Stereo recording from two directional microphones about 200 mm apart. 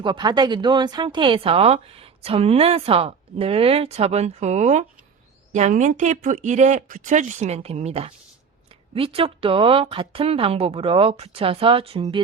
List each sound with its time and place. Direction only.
0.0 s speech: 20° right (ahead or behind)